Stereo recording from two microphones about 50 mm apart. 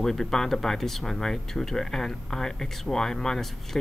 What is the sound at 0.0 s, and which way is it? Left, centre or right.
Speech, centre.